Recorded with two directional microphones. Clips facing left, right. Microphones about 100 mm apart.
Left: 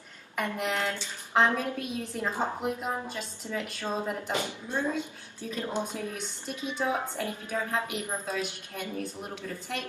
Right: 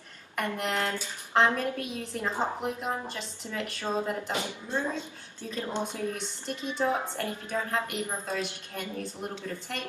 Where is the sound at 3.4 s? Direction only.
10° left (ahead or behind).